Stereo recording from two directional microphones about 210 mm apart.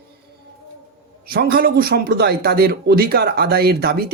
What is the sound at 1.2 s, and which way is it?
Speech, 45° right (ahead or behind).